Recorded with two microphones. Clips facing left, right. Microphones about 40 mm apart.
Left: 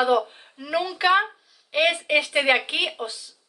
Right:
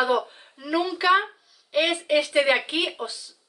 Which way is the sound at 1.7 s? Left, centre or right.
Left.